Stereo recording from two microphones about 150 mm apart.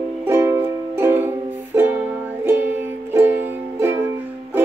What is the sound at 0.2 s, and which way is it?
Music, 15° right (ahead or behind).